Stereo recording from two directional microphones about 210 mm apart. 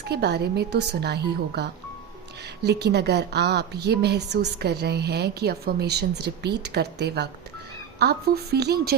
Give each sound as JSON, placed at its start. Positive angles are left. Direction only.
{"t": 0.0, "sound": "a woman's voice", "side_deg": -50}